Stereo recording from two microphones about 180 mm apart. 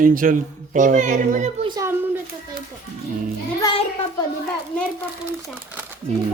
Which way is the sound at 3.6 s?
20° left (ahead or behind).